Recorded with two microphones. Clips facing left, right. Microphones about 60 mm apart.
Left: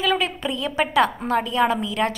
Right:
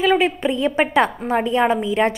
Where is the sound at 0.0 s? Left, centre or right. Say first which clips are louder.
Right 5 dB; right.